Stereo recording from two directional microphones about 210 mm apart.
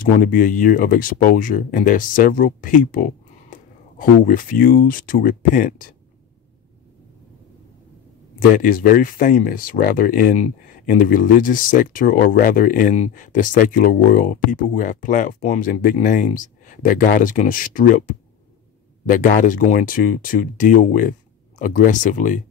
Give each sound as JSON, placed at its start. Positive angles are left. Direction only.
{"t": 0.0, "sound": "speech", "side_deg": 40}
{"t": 8.5, "sound": "speech", "side_deg": 40}